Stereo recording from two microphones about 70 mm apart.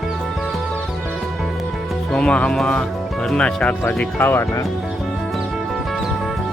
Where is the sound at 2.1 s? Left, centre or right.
Centre.